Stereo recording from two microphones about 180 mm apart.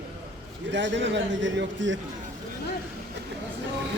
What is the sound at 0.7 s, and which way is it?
A man's voice, 85° right.